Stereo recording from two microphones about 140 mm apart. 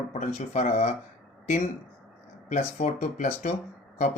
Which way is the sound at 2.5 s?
60° left (ahead or behind).